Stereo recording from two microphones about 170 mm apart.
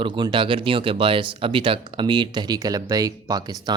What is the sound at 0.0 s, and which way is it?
Speech, 30° right (ahead or behind).